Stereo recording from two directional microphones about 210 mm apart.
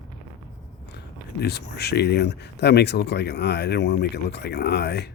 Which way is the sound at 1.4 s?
50° left (ahead or behind).